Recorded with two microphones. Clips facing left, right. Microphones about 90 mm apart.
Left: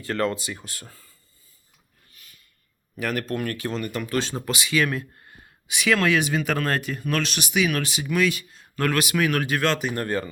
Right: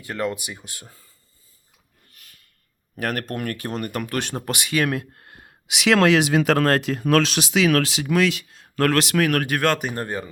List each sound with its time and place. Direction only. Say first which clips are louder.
0.0 s speech: left 1 dB; 15° right (ahead or behind)
2.1 s a sound: right 1 dB; 65° right (ahead or behind)
3.0 s speech: even; 50° right (ahead or behind)
9.9 s speech: left 2 dB; 20° right (ahead or behind)